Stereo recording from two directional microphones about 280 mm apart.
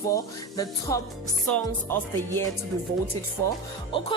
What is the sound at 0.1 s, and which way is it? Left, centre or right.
Speech, centre.